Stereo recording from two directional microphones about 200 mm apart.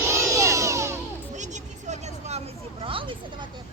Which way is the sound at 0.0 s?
15° right (ahead or behind).